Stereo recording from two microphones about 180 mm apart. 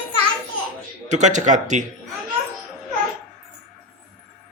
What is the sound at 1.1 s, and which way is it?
Speech, 40° right (ahead or behind).